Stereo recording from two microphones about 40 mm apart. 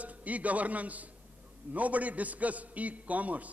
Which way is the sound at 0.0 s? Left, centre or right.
Right.